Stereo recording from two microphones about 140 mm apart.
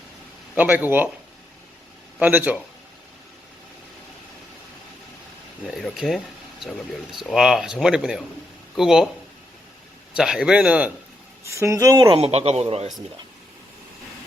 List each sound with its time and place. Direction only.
0.5 s speech: 10° right (ahead or behind)
2.1 s speech: 10° right (ahead or behind)
5.6 s speech: centre (ahead or behind)
10.2 s speech: 5° right (ahead or behind)
11.4 s speech: 20° right (ahead or behind)
12.0 s speech: 40° right (ahead or behind)